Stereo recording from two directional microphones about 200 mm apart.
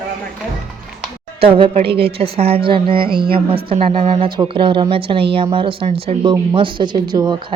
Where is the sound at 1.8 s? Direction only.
55° right (ahead or behind).